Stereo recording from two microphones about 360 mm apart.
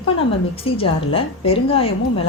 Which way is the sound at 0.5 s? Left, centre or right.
Centre.